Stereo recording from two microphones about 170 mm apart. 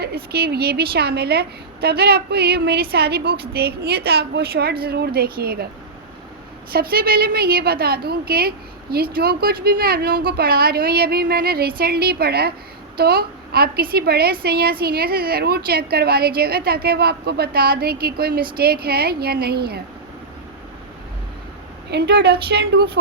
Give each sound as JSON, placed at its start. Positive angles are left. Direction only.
{"t": 0.0, "sound": "a woman's voice", "side_deg": -65}
{"t": 6.7, "sound": "a woman's voice", "side_deg": -60}
{"t": 21.8, "sound": "a woman's voice", "side_deg": -75}